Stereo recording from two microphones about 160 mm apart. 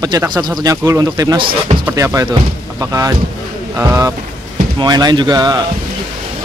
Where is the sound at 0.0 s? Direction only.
25° right (ahead or behind).